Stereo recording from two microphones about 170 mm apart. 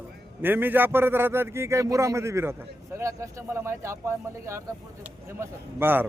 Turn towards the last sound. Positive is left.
turn(degrees=-10)  # may be behind; listen again after turning